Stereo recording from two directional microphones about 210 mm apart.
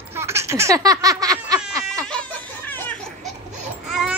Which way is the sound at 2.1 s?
5° left (ahead or behind).